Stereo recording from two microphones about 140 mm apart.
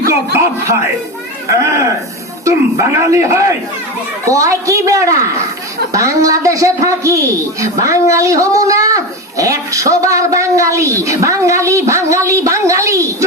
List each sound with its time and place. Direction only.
0.1 s speech: 20° right (ahead or behind)